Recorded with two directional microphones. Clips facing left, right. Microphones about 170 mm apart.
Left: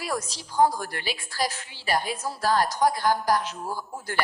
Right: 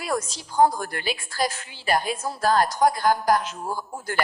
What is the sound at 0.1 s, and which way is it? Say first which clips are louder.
A woman's voice: right 8 dB; 50° right (ahead or behind).